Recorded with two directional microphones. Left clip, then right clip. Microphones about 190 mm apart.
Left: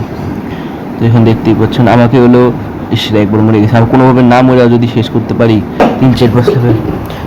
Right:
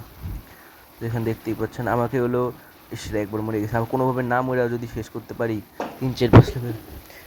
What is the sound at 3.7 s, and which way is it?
Speech, 25° right (ahead or behind).